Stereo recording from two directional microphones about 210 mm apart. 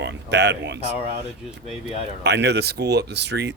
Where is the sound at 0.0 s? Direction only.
55° right (ahead or behind).